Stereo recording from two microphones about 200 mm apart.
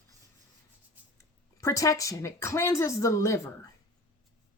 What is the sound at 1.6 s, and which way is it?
Speech, 15° left (ahead or behind).